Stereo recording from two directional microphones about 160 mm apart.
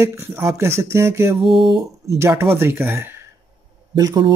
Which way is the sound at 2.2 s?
15° right (ahead or behind).